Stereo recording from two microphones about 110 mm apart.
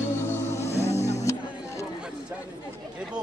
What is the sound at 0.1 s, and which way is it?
Music, 25° left (ahead or behind).